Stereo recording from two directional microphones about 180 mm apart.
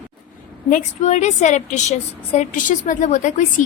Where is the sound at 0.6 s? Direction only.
45° left (ahead or behind).